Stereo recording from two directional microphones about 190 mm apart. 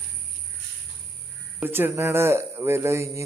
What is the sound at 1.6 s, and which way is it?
A man's voice, 10° right (ahead or behind).